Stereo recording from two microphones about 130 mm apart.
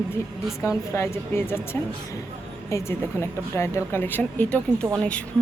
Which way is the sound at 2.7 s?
20° left (ahead or behind).